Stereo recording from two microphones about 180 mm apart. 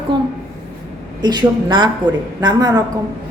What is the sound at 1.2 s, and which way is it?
A woman's voice, 25° right (ahead or behind).